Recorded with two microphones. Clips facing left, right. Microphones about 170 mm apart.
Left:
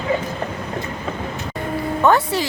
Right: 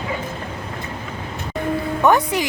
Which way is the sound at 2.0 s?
15° right (ahead or behind).